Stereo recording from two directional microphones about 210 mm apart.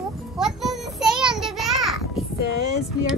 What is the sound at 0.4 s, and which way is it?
Child singing, centre (ahead or behind).